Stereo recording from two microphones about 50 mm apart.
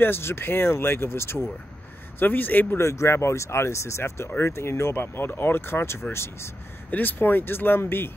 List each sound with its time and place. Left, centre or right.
0.0 s speech: left
2.1 s speech: left
2.8 s speech: left
6.9 s speech: left